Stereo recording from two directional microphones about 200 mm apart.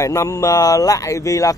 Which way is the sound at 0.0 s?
15° left (ahead or behind).